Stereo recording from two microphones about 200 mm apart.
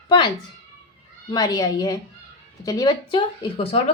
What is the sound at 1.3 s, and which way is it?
A woman's voice, 20° left (ahead or behind).